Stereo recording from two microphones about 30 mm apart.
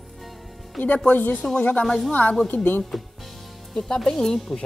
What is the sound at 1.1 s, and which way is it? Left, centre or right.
Speech, left.